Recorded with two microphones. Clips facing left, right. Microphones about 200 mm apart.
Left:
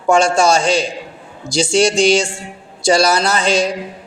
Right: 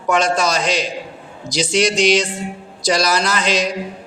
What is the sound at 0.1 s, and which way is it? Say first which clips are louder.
A woman's voice: left 5 dB; 30° left (ahead or behind).